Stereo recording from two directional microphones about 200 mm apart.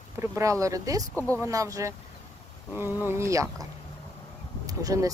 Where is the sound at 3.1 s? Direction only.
15° right (ahead or behind).